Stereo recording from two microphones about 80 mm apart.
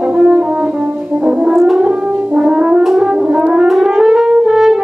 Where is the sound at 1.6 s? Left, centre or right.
Centre.